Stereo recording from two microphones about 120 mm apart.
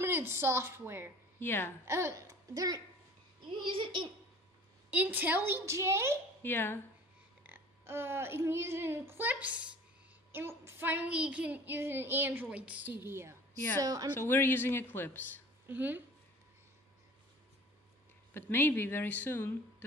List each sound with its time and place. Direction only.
0.0 s a woman's voice: 20° right (ahead or behind)
1.4 s a woman's voice: 20° left (ahead or behind)
1.9 s speech: 25° right (ahead or behind)
3.6 s a child's voice: 45° right (ahead or behind)
4.9 s a woman's voice: 15° right (ahead or behind)
6.4 s speech: 15° left (ahead or behind)
7.4 s a child's voice: 20° right (ahead or behind)
10.3 s child singing: 20° right (ahead or behind)
13.7 s speech: 30° right (ahead or behind)
14.1 s speech: 20° left (ahead or behind)
15.6 s speech: 15° right (ahead or behind)
18.3 s speech: 20° left (ahead or behind)